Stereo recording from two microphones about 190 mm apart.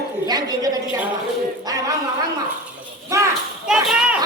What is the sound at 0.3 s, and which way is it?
Speech, 20° right (ahead or behind).